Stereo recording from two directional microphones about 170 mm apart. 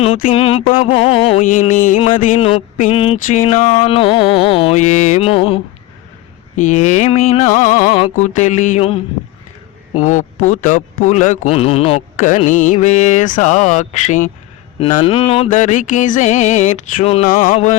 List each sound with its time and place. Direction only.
0.3 s music: 35° left (ahead or behind)
1.5 s a man's voice: 50° left (ahead or behind)
2.4 s music: 35° left (ahead or behind)
6.6 s a man's voice: 45° left (ahead or behind)
15.0 s music: 35° left (ahead or behind)
15.4 s a man's voice: 45° left (ahead or behind)
17.2 s music: 55° left (ahead or behind)
17.5 s a man's voice: 40° left (ahead or behind)